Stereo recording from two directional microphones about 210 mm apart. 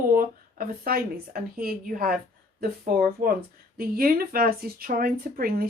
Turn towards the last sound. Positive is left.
turn(degrees=-45)  # may be behind; listen again after turning